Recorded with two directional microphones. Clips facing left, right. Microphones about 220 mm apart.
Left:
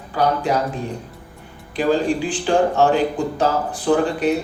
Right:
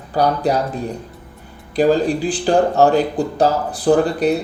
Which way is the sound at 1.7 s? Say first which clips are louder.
Right 3 dB; 40° right (ahead or behind).